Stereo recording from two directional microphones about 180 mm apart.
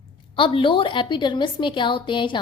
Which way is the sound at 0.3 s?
30° left (ahead or behind).